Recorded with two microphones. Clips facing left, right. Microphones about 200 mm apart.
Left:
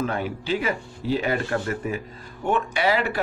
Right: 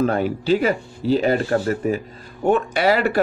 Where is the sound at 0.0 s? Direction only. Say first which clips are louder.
Right 7 dB; 40° right (ahead or behind).